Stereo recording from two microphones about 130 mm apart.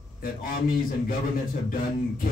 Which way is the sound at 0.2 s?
90° left.